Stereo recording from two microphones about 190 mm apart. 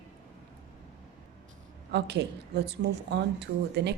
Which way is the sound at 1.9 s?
60° right (ahead or behind).